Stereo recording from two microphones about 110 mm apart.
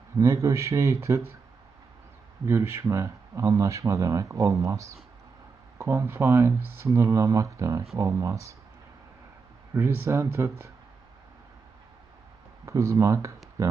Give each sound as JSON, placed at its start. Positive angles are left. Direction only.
{"t": 0.2, "sound": "speech", "side_deg": -25}
{"t": 2.5, "sound": "speech", "side_deg": -25}
{"t": 9.7, "sound": "speech", "side_deg": -25}
{"t": 12.6, "sound": "speech", "side_deg": -25}